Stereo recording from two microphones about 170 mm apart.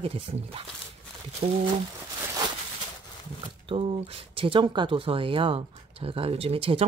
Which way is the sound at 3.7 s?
35° right (ahead or behind).